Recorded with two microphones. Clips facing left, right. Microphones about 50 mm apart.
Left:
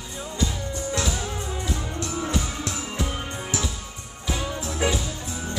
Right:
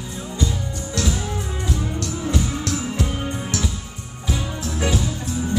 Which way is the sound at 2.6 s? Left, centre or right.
Centre.